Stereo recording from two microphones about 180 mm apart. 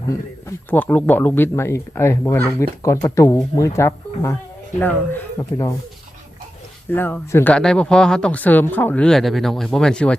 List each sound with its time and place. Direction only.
0.4 s speech: 10° left (ahead or behind)
6.9 s speech: 10° left (ahead or behind)